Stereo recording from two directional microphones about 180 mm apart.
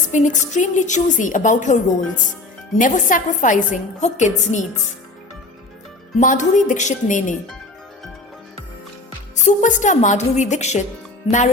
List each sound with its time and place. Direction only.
0.1 s a woman's voice: 45° left (ahead or behind)
6.1 s a woman's voice: 45° left (ahead or behind)
9.4 s a woman's voice: 40° left (ahead or behind)